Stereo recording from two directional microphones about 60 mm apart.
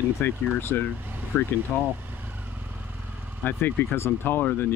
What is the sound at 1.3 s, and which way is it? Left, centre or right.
Speech, left.